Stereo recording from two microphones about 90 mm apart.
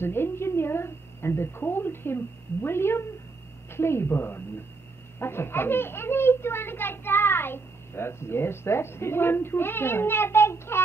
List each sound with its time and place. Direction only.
0.0 s a child's voice: 25° left (ahead or behind)